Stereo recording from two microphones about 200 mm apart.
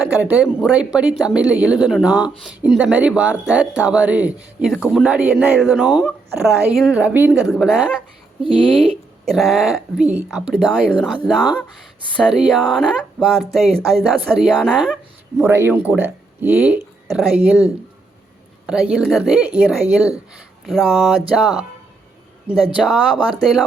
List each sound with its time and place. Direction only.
0.0 s speech: 5° right (ahead or behind)
8.4 s speech: 25° right (ahead or behind)
9.2 s speech: centre (ahead or behind)
15.4 s speech: 10° right (ahead or behind)
18.6 s speech: 5° right (ahead or behind)
22.8 s speech: centre (ahead or behind)